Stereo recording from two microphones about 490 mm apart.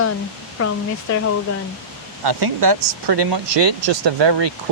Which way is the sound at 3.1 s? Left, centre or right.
Right.